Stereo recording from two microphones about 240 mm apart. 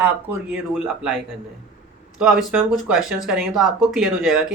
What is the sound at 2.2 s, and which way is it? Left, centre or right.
Speech, centre.